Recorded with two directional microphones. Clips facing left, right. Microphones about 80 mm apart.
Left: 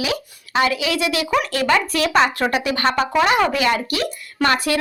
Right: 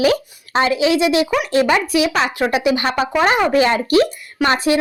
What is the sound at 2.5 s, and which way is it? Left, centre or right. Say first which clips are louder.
Speech: right 2 dB; centre.